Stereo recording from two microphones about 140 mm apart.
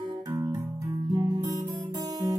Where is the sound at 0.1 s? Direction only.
30° right (ahead or behind).